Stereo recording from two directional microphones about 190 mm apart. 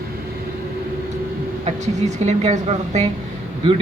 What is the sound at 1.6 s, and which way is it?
A man's voice, 35° right (ahead or behind).